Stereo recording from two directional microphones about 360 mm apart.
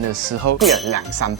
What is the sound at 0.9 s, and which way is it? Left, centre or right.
Speech, right.